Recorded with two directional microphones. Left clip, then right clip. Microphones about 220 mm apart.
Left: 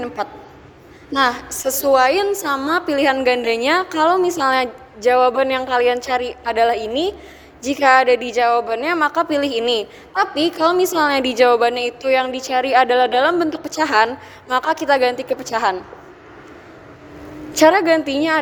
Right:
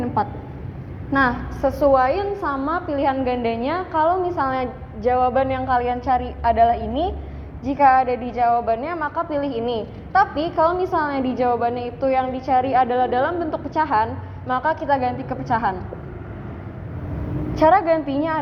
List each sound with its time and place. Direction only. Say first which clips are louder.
1.1 s a woman's voice: left 2 dB; 55° left (ahead or behind)
17.5 s a woman's voice: left 3 dB; 55° left (ahead or behind)